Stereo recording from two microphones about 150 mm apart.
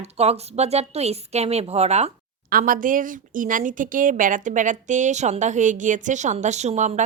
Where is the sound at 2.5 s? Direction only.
70° right (ahead or behind).